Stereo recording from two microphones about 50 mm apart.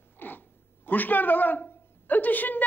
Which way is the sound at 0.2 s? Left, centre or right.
Left.